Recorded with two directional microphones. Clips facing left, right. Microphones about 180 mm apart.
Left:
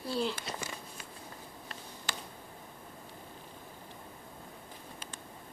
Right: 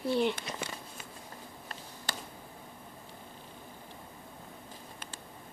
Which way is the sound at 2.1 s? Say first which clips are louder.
Right 2 dB; 35° right (ahead or behind).